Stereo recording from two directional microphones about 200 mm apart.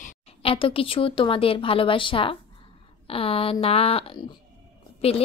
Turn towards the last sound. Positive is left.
turn(degrees=30)  # may be behind; listen again after turning